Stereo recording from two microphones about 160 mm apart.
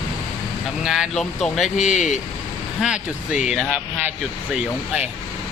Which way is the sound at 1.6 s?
45° left (ahead or behind).